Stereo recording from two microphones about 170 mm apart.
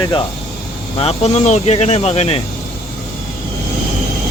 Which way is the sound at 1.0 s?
35° left (ahead or behind).